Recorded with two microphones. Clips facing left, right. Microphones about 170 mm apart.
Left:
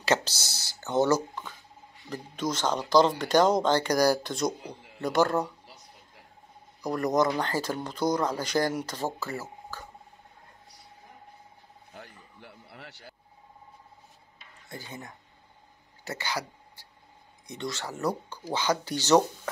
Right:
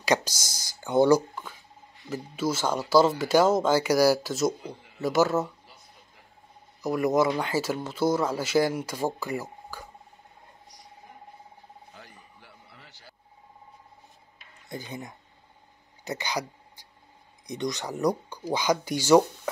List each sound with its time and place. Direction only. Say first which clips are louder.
0.0 s speech: right 1 dB; 15° right (ahead or behind)
6.8 s speech: right 2 dB; 5° right (ahead or behind)
12.4 s a sound: left 5 dB; 60° left (ahead or behind)
14.7 s speech: right 4 dB; 15° right (ahead or behind)
16.0 s a sound: right 2 dB; 15° right (ahead or behind)
17.5 s speech: right 4 dB; 15° right (ahead or behind)